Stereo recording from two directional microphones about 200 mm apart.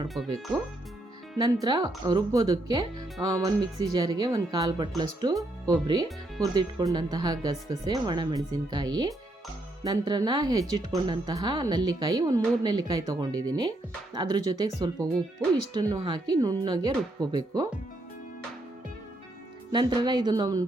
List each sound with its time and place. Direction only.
1.6 s speech: 20° right (ahead or behind)
19.7 s speech: 20° right (ahead or behind)